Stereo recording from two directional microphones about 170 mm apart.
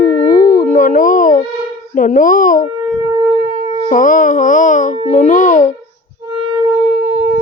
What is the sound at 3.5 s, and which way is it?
Music, 30° right (ahead or behind).